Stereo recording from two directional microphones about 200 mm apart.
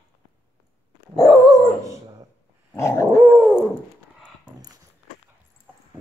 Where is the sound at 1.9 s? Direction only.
15° right (ahead or behind).